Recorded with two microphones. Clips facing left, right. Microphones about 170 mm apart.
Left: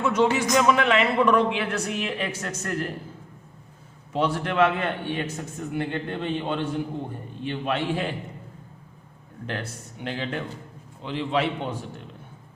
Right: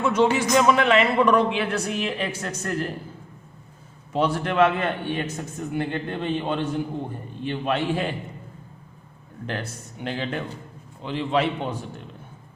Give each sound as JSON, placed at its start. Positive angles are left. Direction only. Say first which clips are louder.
{"t": 0.0, "sound": "a man's voice", "louder": "right 1 dB", "side_deg": -30}
{"t": 4.1, "sound": "a man's voice", "louder": "right 2 dB", "side_deg": -40}
{"t": 9.5, "sound": "a man's voice", "louder": "right 1 dB", "side_deg": -40}